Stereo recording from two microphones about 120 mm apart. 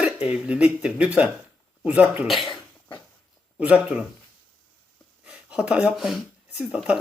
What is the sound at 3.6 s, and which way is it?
Speech, 10° right (ahead or behind).